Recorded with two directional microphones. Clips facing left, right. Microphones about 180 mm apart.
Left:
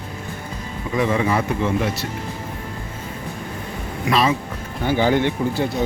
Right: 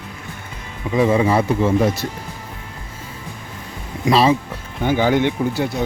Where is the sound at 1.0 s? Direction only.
30° right (ahead or behind).